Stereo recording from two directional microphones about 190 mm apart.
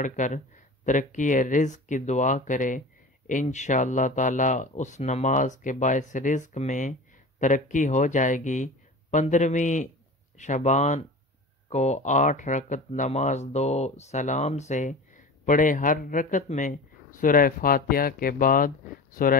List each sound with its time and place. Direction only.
0.0 s speech: 40° left (ahead or behind)